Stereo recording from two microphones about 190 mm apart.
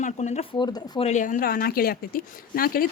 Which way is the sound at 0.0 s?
40° left (ahead or behind).